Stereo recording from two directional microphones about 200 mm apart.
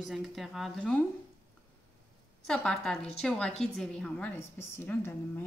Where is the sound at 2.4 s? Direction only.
5° left (ahead or behind).